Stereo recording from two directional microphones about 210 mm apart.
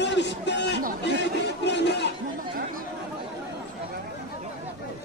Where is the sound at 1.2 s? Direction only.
55° left (ahead or behind).